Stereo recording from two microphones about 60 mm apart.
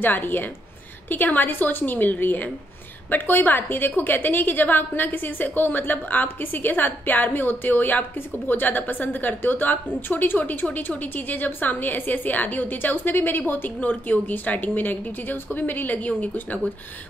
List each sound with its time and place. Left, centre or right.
0.0 s a woman's voice: left